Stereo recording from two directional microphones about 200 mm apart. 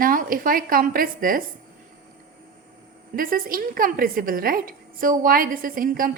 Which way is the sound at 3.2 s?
45° right (ahead or behind).